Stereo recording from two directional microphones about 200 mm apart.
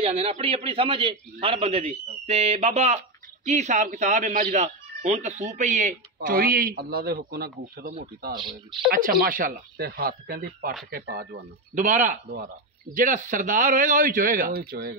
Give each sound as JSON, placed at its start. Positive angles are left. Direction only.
{"t": 0.0, "sound": "a man's voice", "side_deg": -30}
{"t": 8.4, "sound": "a man's voice", "side_deg": -20}
{"t": 9.2, "sound": "speech", "side_deg": -45}
{"t": 11.7, "sound": "speech", "side_deg": -40}